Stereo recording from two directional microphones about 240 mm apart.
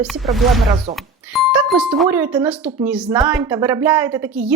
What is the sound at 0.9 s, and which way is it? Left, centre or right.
Speech, right.